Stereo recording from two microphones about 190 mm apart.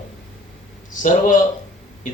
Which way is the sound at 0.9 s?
40° left (ahead or behind).